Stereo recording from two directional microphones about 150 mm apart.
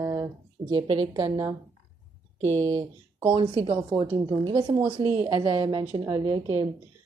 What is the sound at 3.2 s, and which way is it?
A woman's voice, 35° right (ahead or behind).